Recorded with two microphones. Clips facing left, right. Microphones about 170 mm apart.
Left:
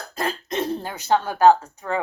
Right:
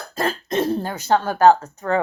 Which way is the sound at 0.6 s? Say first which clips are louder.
Right 5 dB; 15° left (ahead or behind).